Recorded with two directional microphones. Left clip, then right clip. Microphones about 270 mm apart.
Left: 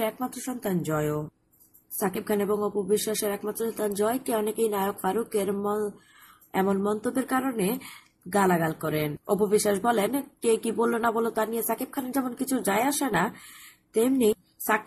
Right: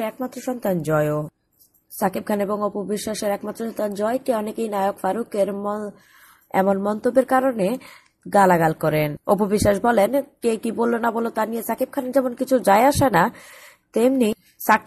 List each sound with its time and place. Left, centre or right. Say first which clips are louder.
0.0 s speech: right 3 dB; centre